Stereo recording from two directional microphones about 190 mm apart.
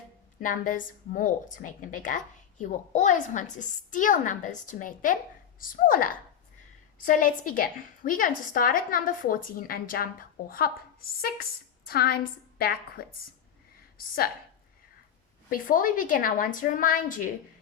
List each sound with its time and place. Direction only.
0.3 s a woman's voice: 45° left (ahead or behind)
11.9 s a woman's voice: 55° left (ahead or behind)
15.4 s a woman's voice: 45° left (ahead or behind)